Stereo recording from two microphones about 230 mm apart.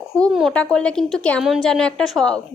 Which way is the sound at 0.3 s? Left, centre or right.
Centre.